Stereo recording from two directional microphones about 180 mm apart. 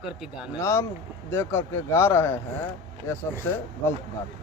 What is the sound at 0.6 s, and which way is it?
Speech, 15° left (ahead or behind).